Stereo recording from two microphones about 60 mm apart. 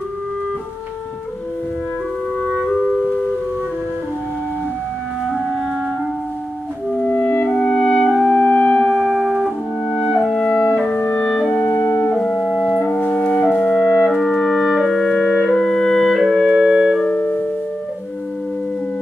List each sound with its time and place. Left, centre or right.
2.4 s music: centre
6.9 s music: left
8.9 s music: centre
11.0 s clarinet: left
11.4 s music: left
12.1 s organ: centre
12.4 s organ: centre
12.8 s music: left
13.6 s clarinet: centre
15.4 s music: centre
16.4 s organ: centre
17.1 s music: left